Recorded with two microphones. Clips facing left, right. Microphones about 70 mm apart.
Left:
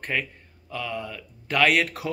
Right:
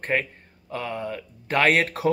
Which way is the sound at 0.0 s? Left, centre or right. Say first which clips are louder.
Right 4 dB; right.